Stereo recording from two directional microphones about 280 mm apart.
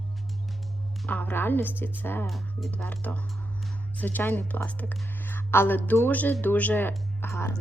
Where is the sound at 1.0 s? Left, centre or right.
Centre.